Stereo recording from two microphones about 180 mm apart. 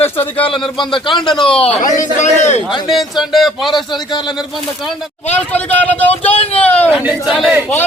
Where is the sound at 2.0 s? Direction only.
40° left (ahead or behind).